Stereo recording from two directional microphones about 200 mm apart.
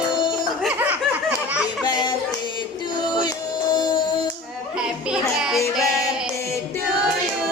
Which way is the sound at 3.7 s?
20° left (ahead or behind).